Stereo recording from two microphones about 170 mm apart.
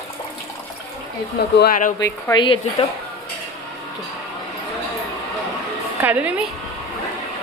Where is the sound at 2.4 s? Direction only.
30° left (ahead or behind).